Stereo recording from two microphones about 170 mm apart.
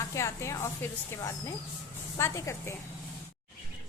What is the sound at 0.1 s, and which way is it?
Speech, 15° left (ahead or behind).